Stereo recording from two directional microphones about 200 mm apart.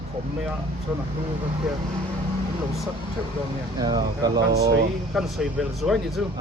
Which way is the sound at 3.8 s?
20° right (ahead or behind).